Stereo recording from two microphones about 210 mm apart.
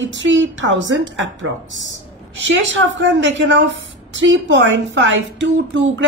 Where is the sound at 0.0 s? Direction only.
60° right (ahead or behind).